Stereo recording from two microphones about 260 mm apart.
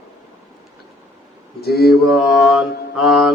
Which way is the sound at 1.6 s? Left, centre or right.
Left.